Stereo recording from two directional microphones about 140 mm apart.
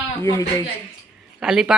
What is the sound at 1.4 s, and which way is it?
Speech, 5° right (ahead or behind).